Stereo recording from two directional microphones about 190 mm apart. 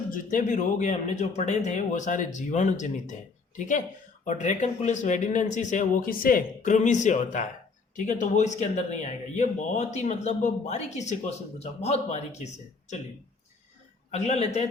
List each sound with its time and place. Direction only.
0.1 s speech: 45° left (ahead or behind)
4.3 s speech: 40° left (ahead or behind)
14.1 s speech: 35° left (ahead or behind)